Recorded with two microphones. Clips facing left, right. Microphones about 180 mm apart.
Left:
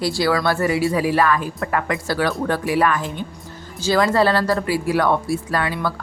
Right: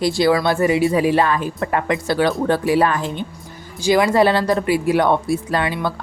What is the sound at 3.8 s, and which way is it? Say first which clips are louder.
Speech: right 2 dB; 15° right (ahead or behind).